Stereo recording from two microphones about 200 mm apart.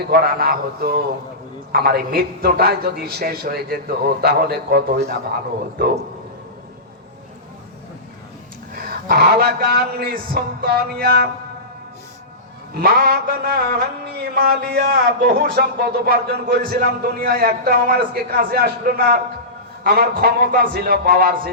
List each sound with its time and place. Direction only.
0.1 s mantra: 50° right (ahead or behind)
8.7 s mantra: 50° right (ahead or behind)
12.8 s mantra: 50° right (ahead or behind)